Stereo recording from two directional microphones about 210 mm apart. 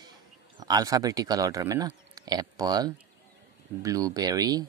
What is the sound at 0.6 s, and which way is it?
Speech, 20° right (ahead or behind).